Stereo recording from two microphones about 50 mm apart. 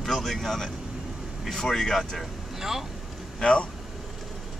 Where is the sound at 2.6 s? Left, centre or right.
Centre.